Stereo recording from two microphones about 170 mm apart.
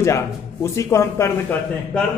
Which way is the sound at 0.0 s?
15° left (ahead or behind).